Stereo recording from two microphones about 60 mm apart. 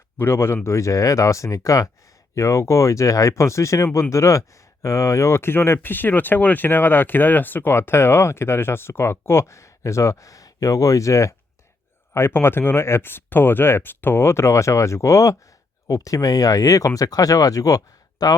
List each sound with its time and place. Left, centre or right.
0.2 s speech: left
12.1 s speech: left